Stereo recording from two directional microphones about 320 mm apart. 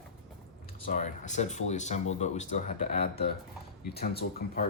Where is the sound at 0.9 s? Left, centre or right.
Left.